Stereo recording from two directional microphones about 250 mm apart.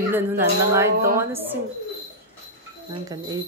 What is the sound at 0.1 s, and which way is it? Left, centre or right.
A woman's voice, centre.